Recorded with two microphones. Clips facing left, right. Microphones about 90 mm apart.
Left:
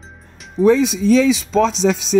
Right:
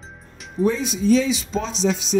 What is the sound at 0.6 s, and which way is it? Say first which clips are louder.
Speech: left 6 dB; 90° left.